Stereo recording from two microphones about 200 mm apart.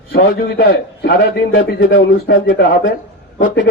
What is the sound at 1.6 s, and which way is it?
Speech, 70° left (ahead or behind).